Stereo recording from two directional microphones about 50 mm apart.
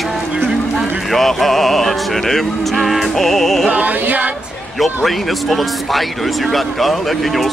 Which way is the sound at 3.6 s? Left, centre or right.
Right.